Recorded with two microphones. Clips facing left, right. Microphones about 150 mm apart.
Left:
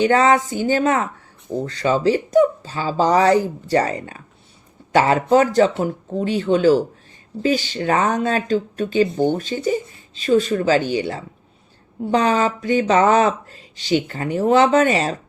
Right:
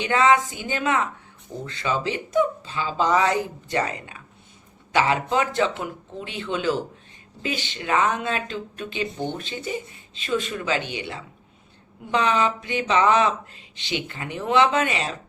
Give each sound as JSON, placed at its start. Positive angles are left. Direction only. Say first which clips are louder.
{"t": 0.0, "sound": "speech", "louder": "left 4 dB", "side_deg": 40}